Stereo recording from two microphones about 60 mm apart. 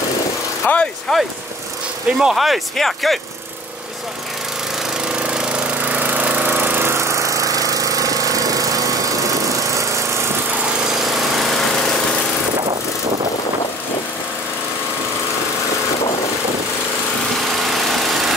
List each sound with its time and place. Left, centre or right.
0.7 s a sound: left
1.1 s speech: centre
2.1 s speech: centre
5.1 s jackhammer: centre
5.9 s jackhammer: right
6.9 s jackhammer: right
17.6 s engine: centre